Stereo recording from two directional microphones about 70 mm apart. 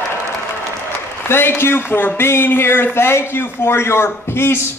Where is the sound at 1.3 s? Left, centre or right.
Left.